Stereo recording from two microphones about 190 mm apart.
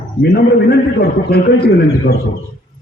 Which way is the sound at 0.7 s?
55° left (ahead or behind).